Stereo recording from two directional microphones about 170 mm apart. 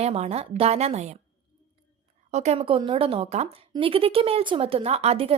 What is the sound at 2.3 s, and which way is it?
Speech, 40° right (ahead or behind).